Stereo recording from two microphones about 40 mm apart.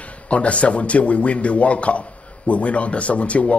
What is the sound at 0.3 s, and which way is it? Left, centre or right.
A man's voice, left.